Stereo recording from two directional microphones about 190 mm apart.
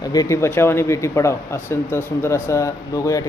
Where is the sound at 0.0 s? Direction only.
20° left (ahead or behind).